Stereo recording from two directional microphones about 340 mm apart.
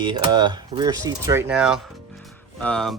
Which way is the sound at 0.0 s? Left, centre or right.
Centre.